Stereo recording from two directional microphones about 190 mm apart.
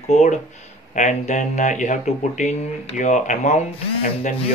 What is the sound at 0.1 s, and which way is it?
Speech, 35° left (ahead or behind).